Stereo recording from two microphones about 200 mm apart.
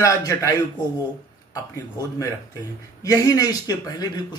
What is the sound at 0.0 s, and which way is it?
Speech, 15° left (ahead or behind).